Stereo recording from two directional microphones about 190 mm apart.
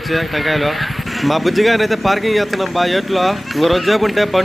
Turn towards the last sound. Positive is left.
turn(degrees=0)  # may be behind; listen again after turning